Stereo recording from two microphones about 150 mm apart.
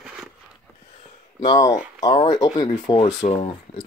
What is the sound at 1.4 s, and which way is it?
Speech, 25° left (ahead or behind).